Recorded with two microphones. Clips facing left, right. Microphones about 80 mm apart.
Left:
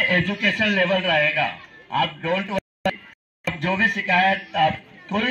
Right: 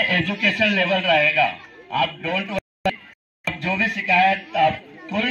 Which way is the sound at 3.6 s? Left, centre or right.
Left.